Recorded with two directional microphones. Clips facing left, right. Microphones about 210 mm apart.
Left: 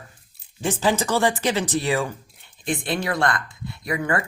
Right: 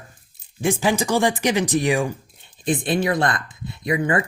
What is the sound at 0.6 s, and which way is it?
Speech, 10° right (ahead or behind).